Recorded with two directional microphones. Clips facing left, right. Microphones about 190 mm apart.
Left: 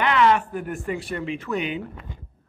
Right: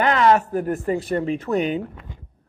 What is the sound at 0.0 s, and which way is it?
A man's voice, 40° right (ahead or behind).